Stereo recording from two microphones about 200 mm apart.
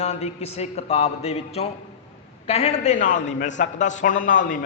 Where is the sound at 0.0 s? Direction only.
30° left (ahead or behind).